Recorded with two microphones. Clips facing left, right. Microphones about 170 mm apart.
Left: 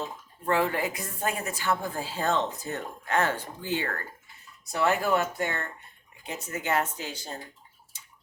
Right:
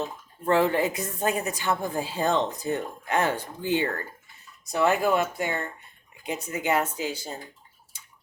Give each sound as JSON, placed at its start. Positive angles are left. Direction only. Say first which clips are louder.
{"t": 0.4, "sound": "a woman's voice", "louder": "right 4 dB", "side_deg": -25}